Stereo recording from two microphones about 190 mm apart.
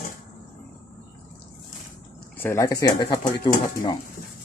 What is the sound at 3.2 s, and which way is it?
Speech, 45° left (ahead or behind).